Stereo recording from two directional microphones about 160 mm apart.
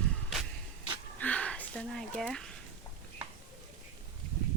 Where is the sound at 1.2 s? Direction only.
10° left (ahead or behind).